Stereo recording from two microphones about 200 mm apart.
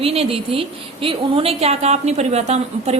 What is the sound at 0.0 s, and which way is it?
A woman's voice, 30° right (ahead or behind).